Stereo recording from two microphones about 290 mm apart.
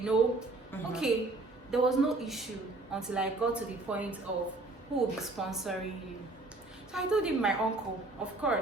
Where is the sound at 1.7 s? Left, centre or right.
Centre.